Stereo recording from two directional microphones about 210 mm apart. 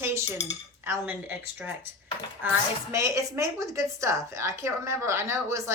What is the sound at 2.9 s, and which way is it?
Speech, 15° right (ahead or behind).